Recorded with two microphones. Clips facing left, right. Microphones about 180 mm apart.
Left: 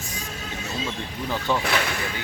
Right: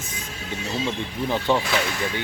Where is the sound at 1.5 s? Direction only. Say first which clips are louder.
Right 3 dB; 20° right (ahead or behind).